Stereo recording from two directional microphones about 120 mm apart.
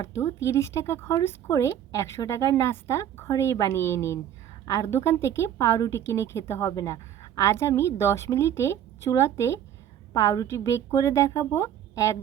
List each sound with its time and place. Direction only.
0.0 s a woman's voice: 25° left (ahead or behind)